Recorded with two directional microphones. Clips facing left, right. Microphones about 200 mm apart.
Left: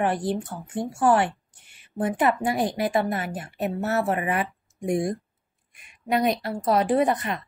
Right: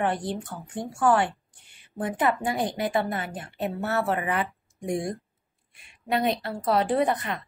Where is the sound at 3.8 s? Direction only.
25° left (ahead or behind).